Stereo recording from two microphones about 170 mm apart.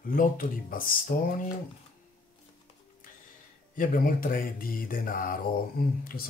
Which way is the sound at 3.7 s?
50° left (ahead or behind).